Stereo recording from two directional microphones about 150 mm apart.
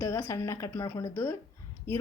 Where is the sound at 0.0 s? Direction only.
20° left (ahead or behind).